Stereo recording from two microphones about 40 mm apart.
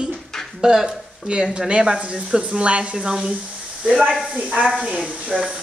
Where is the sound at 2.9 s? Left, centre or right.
Centre.